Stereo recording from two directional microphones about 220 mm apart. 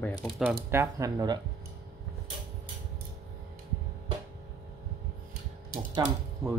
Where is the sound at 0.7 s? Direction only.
15° right (ahead or behind).